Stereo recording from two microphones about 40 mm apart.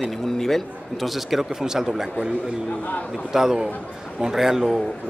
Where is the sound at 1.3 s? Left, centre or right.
Centre.